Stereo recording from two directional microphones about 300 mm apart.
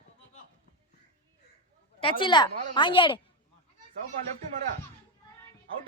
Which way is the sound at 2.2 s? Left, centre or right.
Centre.